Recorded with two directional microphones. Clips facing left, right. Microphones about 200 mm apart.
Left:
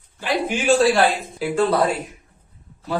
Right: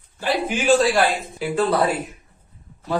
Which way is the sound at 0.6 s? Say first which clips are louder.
Left 1 dB; centre (ahead or behind).